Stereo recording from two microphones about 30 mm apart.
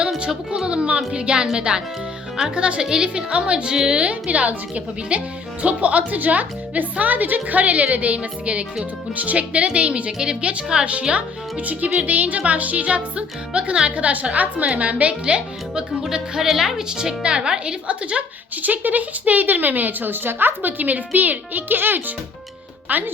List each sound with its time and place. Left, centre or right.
0.6 s speech: right
4.1 s speech: right
5.6 s speech: right
6.1 s speech: right
9.1 s speech: right
10.1 s speech: right
11.6 s speech: right
13.9 s speech: right
15.2 s speech: right
16.4 s a woman's voice: centre
16.9 s speech: right
17.8 s speech: right
18.5 s a woman's voice: right
22.9 s a woman's voice: right